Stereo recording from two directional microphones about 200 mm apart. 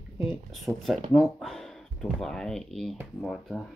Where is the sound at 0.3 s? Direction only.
Centre (ahead or behind).